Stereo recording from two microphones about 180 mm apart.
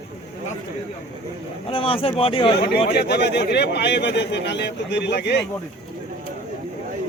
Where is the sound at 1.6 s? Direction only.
30° left (ahead or behind).